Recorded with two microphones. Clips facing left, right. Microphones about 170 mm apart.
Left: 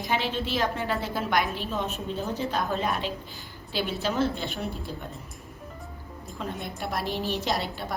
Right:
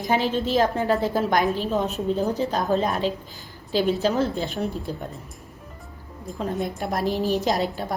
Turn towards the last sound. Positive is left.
turn(degrees=-40)  # may be behind; listen again after turning